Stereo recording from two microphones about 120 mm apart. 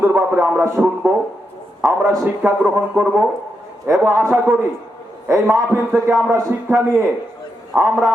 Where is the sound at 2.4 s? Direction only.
15° right (ahead or behind).